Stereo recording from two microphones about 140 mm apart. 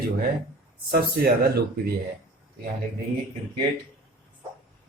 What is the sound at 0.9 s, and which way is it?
Speech, 90° right.